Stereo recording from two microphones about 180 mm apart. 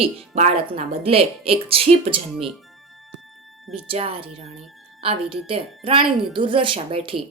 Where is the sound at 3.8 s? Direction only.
30° right (ahead or behind).